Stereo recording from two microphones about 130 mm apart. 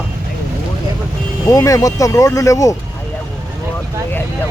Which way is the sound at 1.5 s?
25° left (ahead or behind).